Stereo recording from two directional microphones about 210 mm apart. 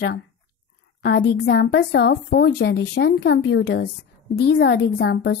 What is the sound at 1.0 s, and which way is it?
A woman's voice, 50° left (ahead or behind).